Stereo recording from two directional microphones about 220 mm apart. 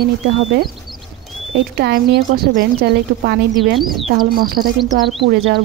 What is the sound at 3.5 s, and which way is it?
Speech, centre (ahead or behind).